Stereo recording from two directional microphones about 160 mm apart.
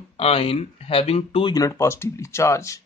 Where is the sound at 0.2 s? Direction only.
35° left (ahead or behind).